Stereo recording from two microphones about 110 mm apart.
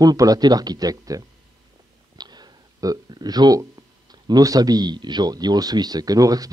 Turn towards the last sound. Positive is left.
turn(degrees=-35)  # may be behind; listen again after turning